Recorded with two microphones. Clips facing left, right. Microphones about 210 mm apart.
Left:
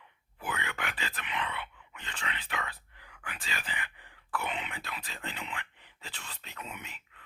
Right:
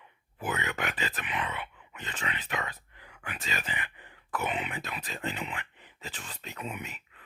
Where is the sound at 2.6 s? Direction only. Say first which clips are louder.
Right 3 dB; 20° right (ahead or behind).